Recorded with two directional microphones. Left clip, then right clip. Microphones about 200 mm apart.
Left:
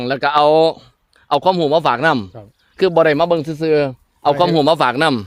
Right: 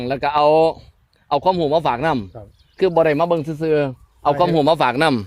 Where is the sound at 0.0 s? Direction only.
20° left (ahead or behind).